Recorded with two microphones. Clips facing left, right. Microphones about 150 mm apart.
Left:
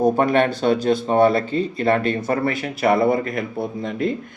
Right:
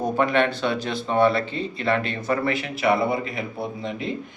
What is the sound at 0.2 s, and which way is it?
Speech, 40° left (ahead or behind).